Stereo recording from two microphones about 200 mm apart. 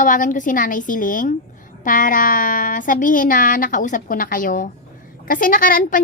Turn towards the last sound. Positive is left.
turn(degrees=40)  # may be behind; listen again after turning